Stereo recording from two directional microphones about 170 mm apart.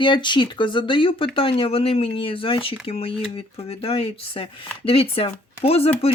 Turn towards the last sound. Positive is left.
turn(degrees=35)  # may be behind; listen again after turning